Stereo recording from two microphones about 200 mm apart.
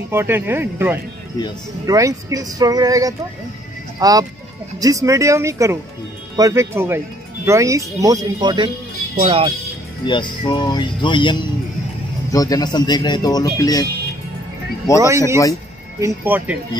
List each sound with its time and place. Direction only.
0.1 s speech: 10° right (ahead or behind); by 9.5 s 30° right (ahead or behind)
10.0 s speech: 25° left (ahead or behind)
15.0 s speech: 15° right (ahead or behind)